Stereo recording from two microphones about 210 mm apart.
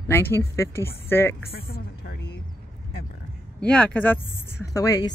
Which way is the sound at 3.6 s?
5° left (ahead or behind).